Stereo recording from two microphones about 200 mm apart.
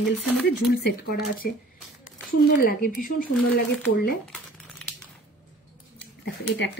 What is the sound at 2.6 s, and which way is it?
Speech, 45° left (ahead or behind).